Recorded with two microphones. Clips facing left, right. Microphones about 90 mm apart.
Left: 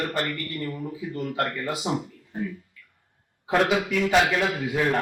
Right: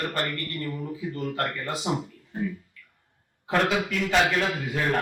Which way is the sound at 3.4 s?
10° left (ahead or behind).